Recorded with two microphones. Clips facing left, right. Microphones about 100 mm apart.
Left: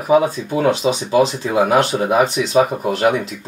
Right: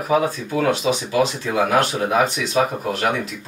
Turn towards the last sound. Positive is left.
turn(degrees=20)  # may be behind; listen again after turning